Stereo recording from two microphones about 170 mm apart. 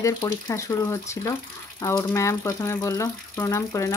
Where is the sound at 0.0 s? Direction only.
20° left (ahead or behind).